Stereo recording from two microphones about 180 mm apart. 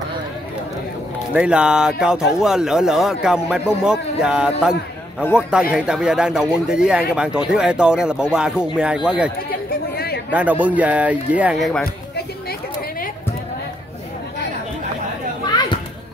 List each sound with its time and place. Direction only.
1.3 s speech: 5° right (ahead or behind)
9.5 s chatter: 60° left (ahead or behind)
10.3 s speech: 10° right (ahead or behind)
15.4 s children playing: 25° left (ahead or behind)